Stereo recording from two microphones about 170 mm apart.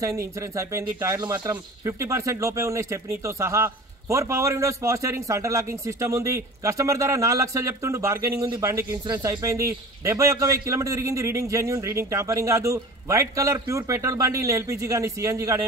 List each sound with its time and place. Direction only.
0.0 s speech: 20° right (ahead or behind)